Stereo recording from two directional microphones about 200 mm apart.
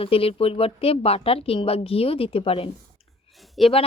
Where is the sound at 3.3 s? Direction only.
Centre (ahead or behind).